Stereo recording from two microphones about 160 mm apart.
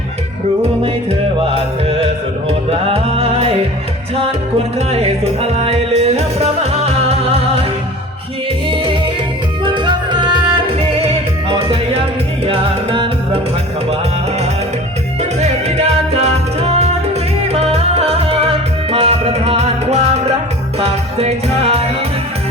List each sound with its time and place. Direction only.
1.4 s music: 35° right (ahead or behind)
4.9 s music: 40° right (ahead or behind)
8.7 s music: 35° right (ahead or behind)
15.2 s music: 45° right (ahead or behind)